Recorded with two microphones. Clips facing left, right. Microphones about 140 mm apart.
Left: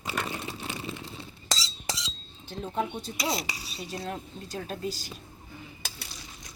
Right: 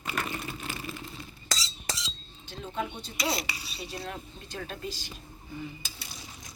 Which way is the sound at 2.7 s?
45° left (ahead or behind).